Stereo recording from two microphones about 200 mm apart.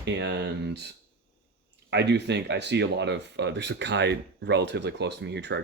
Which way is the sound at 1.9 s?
60° right (ahead or behind).